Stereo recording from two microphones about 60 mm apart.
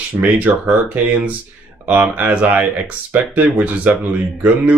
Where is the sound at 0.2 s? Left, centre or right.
Right.